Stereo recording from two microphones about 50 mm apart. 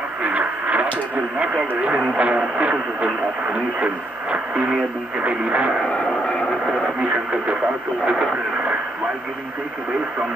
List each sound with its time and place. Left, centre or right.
0.2 s radio: right
2.5 s speech: right
5.9 s vehicle: left
7.0 s speech: right